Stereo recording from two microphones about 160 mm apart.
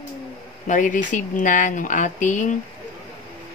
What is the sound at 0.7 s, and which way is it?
Speech, 55° left (ahead or behind).